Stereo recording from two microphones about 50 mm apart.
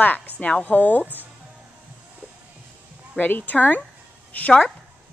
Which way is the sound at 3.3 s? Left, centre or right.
Left.